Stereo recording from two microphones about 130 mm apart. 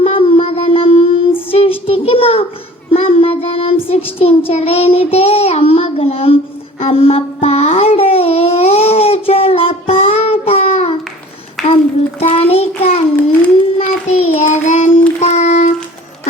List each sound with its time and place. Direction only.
0.0 s child singing: 50° left (ahead or behind)
11.6 s a sound: centre (ahead or behind)
12.3 s child singing: 50° left (ahead or behind)